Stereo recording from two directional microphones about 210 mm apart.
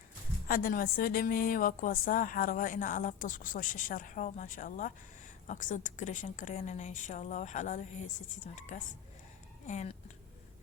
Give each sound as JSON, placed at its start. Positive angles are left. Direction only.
{"t": 0.4, "sound": "a woman's voice", "side_deg": 40}